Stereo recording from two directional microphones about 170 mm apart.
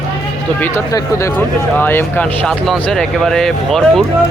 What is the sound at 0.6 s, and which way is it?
Speech, 15° left (ahead or behind).